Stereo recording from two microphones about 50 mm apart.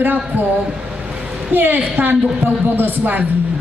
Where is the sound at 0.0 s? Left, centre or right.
Right.